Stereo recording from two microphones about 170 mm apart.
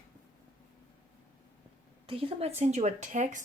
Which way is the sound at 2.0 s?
35° right (ahead or behind).